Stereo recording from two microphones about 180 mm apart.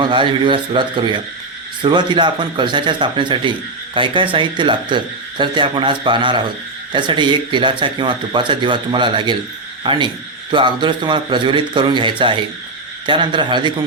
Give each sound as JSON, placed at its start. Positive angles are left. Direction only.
{"t": 0.0, "sound": "speech", "side_deg": -25}